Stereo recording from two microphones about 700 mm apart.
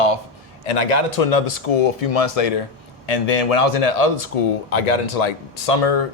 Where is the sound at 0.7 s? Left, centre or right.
Left.